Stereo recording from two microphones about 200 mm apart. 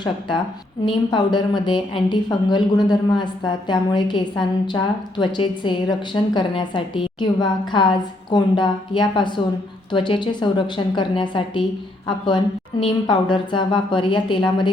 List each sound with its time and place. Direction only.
0.0 s a woman's voice: 25° left (ahead or behind)